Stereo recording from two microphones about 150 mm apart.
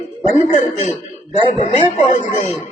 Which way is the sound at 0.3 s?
45° left (ahead or behind).